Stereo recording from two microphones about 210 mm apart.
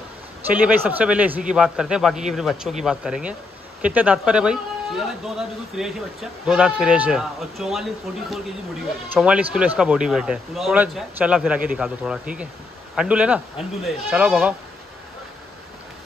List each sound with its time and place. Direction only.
0.5 s a man's voice: 10° right (ahead or behind)